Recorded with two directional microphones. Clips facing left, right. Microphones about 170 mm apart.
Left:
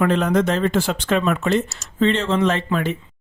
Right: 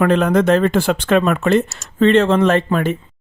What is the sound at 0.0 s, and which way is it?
Speech, 60° right (ahead or behind).